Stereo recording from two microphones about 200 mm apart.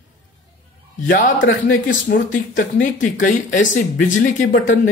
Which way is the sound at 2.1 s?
40° left (ahead or behind).